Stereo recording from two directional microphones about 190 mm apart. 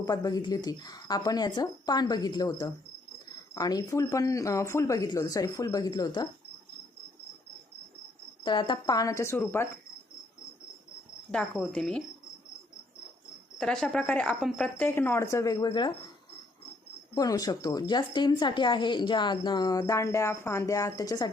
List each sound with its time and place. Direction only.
0.0 s a woman's voice: 20° left (ahead or behind)
8.4 s speech: 25° left (ahead or behind)
11.3 s a woman's voice: 5° left (ahead or behind)
13.6 s a woman's voice: 5° left (ahead or behind)
14.8 s speech: 10° left (ahead or behind)
17.2 s a woman's voice: 20° left (ahead or behind)